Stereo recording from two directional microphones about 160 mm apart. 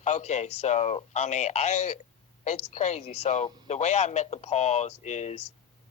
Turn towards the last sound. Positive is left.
turn(degrees=45)  # may be behind; listen again after turning